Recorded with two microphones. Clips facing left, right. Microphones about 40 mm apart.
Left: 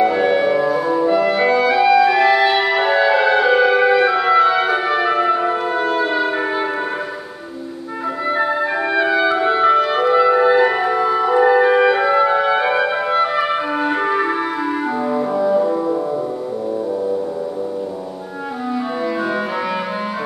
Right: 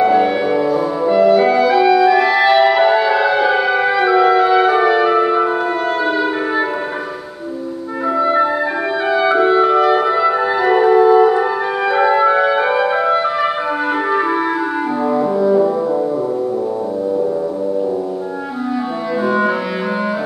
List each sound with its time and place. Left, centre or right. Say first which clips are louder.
0.0 s clarinet: right 2 dB; centre
9.0 s music: right 4 dB; centre
11.5 s music: left 5 dB; centre
11.9 s music: right 2 dB; centre
15.0 s music: right 4 dB; centre